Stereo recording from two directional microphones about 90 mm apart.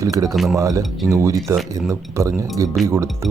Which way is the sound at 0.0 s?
40° right (ahead or behind).